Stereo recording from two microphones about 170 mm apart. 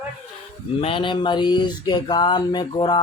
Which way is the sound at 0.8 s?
30° left (ahead or behind).